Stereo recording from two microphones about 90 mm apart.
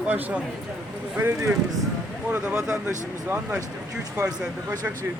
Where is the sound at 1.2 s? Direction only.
25° right (ahead or behind).